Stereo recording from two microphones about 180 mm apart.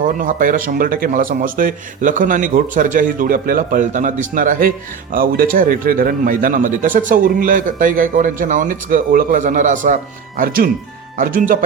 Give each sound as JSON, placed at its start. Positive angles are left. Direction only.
{"t": 0.0, "sound": "speech", "side_deg": -50}